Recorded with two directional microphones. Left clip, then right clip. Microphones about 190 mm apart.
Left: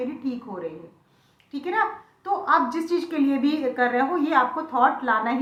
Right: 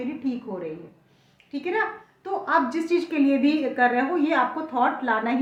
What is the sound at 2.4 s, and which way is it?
A woman's voice, 35° right (ahead or behind).